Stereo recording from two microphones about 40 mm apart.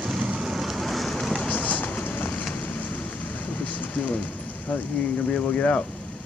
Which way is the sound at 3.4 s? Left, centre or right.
Left.